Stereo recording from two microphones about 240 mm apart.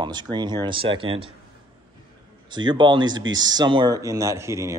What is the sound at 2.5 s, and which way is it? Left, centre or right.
Speech, centre.